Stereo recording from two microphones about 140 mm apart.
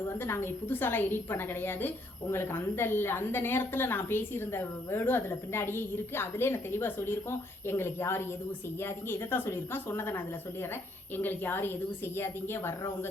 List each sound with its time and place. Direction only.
0.1 s a woman's voice: 15° left (ahead or behind)